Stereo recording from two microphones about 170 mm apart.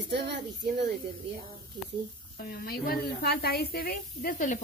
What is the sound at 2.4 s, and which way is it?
A woman's voice, 60° left (ahead or behind).